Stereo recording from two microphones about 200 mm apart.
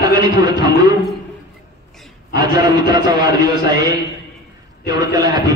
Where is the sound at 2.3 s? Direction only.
20° right (ahead or behind).